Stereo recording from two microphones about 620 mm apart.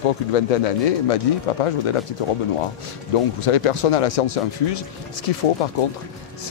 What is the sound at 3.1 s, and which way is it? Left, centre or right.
Speech, left.